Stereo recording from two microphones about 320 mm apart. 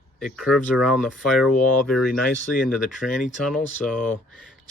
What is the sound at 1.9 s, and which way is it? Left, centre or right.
Speech, centre.